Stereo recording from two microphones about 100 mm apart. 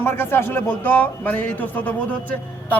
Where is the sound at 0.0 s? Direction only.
25° left (ahead or behind).